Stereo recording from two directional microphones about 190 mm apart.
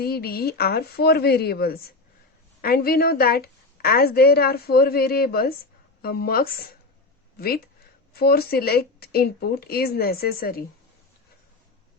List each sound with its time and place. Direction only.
0.0 s a woman's voice: 55° left (ahead or behind)